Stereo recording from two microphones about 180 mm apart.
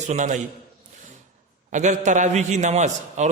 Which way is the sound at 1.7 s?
40° right (ahead or behind).